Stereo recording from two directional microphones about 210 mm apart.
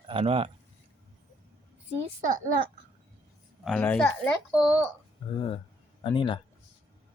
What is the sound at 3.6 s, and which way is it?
Speech, 5° left (ahead or behind).